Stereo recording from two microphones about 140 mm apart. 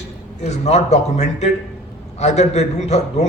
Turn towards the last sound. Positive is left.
turn(degrees=50)  # may be behind; listen again after turning